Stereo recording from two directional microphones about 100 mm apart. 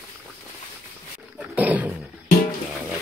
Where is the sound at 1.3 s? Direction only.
15° right (ahead or behind).